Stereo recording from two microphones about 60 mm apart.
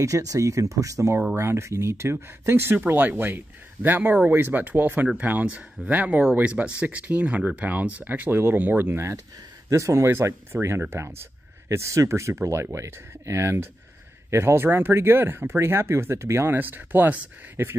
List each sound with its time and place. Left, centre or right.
0.0 s speech: right
1.3 s speech: right
9.7 s speech: right
11.7 s speech: right
16.5 s speech: right